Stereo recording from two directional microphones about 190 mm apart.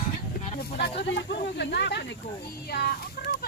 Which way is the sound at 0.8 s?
65° left (ahead or behind).